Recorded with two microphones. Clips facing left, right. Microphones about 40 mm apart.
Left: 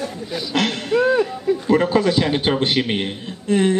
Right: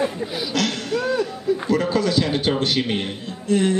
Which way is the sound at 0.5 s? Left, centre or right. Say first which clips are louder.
Left 5 dB; left.